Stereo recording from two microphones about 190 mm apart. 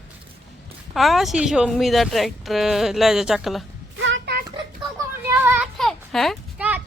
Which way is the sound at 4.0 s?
70° right (ahead or behind).